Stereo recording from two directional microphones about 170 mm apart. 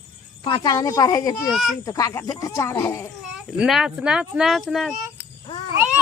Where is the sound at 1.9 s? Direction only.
20° left (ahead or behind).